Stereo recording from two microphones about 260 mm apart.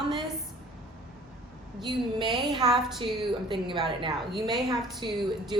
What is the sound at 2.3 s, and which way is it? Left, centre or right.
Speech, centre.